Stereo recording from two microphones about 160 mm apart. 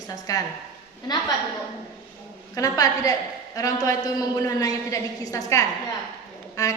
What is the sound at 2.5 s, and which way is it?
A man's voice, 20° left (ahead or behind).